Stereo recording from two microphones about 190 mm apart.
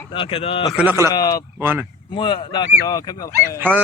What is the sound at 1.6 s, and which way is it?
Speech, 10° right (ahead or behind).